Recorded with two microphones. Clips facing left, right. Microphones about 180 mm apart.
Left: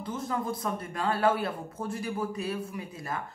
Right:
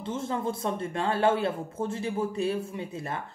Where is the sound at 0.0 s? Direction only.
25° right (ahead or behind).